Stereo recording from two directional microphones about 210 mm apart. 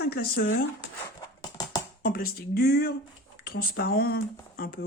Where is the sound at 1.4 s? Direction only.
20° left (ahead or behind).